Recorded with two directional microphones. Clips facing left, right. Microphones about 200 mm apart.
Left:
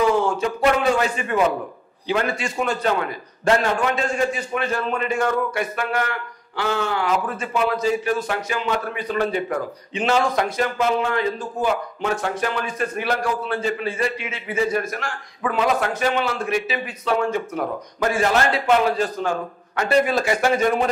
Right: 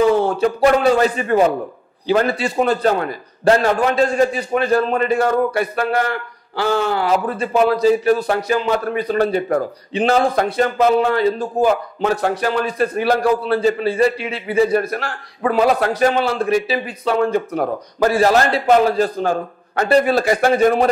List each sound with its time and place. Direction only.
0.9 s a man's voice: 35° right (ahead or behind)